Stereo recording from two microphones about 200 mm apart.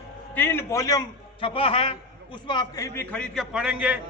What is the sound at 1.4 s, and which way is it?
A man's voice, 25° left (ahead or behind).